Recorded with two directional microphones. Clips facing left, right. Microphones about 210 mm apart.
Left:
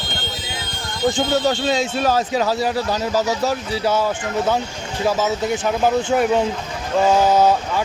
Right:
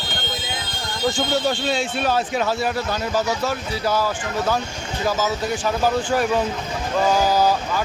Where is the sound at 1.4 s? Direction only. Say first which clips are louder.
Left 3 dB; 40° left (ahead or behind).